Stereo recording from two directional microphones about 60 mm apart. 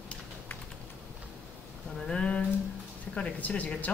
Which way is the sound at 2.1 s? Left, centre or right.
Centre.